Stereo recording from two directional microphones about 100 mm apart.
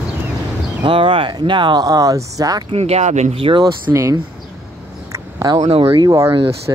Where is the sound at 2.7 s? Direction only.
80° right.